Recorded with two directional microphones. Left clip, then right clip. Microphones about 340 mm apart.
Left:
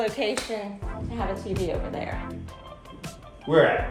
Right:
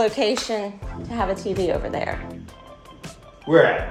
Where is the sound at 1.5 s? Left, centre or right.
Right.